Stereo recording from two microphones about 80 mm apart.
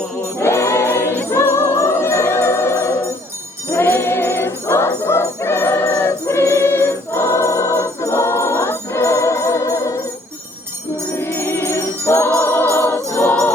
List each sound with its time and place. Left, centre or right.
0.3 s music: left
3.7 s jingle bell: left
11.1 s music: left